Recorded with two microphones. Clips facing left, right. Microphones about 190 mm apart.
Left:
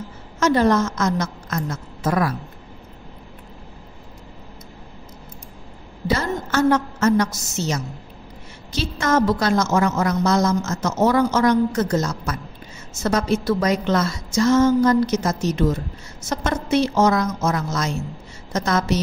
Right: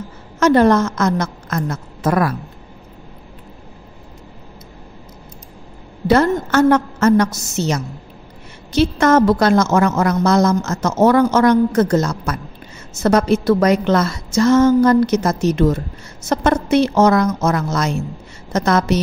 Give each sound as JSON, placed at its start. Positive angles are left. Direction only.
{"t": 0.4, "sound": "a woman's voice", "side_deg": -60}
{"t": 6.0, "sound": "a woman's voice", "side_deg": -60}